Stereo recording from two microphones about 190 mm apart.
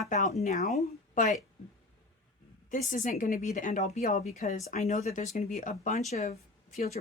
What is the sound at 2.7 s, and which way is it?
A woman's voice, 45° left (ahead or behind).